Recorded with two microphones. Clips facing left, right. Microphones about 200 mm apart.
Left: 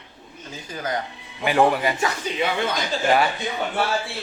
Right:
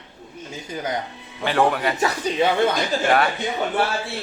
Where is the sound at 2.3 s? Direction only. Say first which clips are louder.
Right 4 dB; 35° right (ahead or behind).